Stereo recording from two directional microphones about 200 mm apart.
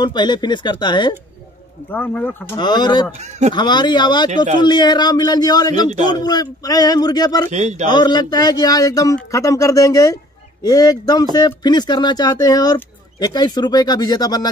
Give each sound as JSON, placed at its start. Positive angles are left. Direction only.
{"t": 0.0, "sound": "speech", "side_deg": 20}
{"t": 1.9, "sound": "speech", "side_deg": 10}
{"t": 2.5, "sound": "speech", "side_deg": 20}
{"t": 3.2, "sound": "speech", "side_deg": -35}
{"t": 3.5, "sound": "speech", "side_deg": 20}
{"t": 7.5, "sound": "speech", "side_deg": -35}
{"t": 7.9, "sound": "speech", "side_deg": 20}